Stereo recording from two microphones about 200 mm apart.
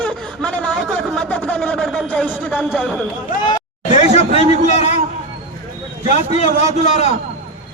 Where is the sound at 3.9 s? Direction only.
35° left (ahead or behind).